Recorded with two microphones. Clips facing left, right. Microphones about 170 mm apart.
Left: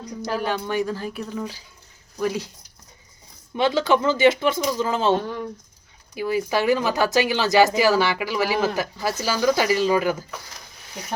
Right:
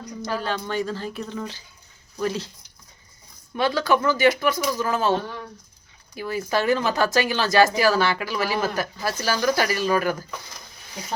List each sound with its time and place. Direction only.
0.3 s speech: 10° left (ahead or behind)
3.5 s speech: 20° left (ahead or behind)
6.1 s speech: 10° left (ahead or behind)